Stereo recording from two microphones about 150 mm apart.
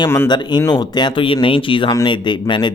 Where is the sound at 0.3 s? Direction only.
30° left (ahead or behind).